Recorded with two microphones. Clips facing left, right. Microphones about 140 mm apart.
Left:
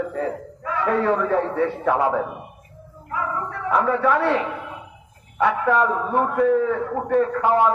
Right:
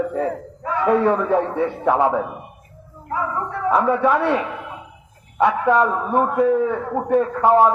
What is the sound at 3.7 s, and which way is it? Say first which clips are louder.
Speech: right 2 dB; 25° right (ahead or behind).